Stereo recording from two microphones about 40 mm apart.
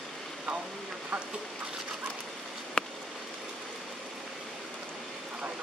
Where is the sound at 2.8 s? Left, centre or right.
Left.